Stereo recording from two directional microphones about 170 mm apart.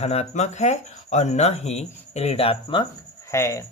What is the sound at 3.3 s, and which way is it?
Speech, 15° left (ahead or behind).